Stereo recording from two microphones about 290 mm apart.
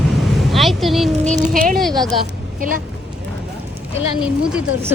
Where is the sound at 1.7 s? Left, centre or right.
Centre.